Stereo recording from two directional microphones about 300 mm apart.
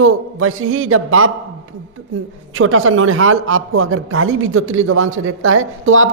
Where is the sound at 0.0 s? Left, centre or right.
Right.